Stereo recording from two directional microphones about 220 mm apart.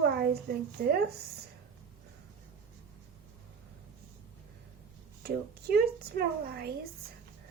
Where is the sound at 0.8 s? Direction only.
45° right (ahead or behind).